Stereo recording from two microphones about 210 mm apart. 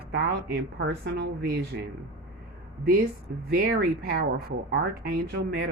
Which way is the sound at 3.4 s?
45° right (ahead or behind).